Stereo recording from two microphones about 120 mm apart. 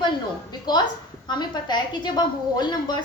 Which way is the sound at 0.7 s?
40° left (ahead or behind).